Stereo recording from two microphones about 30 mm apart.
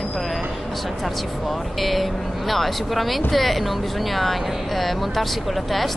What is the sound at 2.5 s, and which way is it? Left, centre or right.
Speech, centre.